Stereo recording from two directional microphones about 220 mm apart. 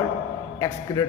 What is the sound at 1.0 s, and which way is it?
Speech, 15° left (ahead or behind).